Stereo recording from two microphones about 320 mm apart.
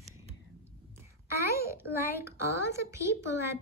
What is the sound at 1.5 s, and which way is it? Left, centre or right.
Speech, left.